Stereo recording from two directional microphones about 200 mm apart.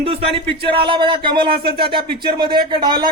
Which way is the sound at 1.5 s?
50° right (ahead or behind).